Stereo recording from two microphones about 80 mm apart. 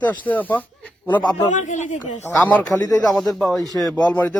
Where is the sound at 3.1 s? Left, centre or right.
Centre.